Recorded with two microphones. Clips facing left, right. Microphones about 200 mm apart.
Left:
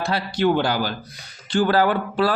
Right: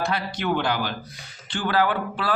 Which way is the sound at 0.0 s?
30° left (ahead or behind).